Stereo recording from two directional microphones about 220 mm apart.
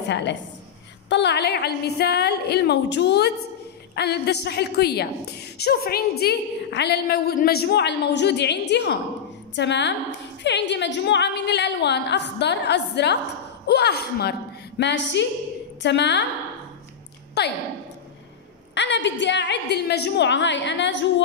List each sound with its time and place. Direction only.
0.1 s a woman's voice: 55° left (ahead or behind)
17.4 s a woman's voice: 50° left (ahead or behind)
18.8 s a woman's voice: 55° left (ahead or behind)